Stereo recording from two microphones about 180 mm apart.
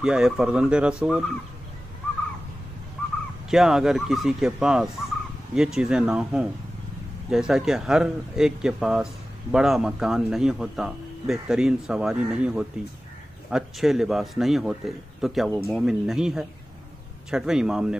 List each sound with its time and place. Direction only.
0.0 s speech: 5° right (ahead or behind)
3.4 s speech: centre (ahead or behind)